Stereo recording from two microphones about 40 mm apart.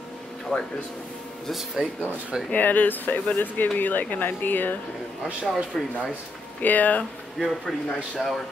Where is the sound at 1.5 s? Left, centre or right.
Centre.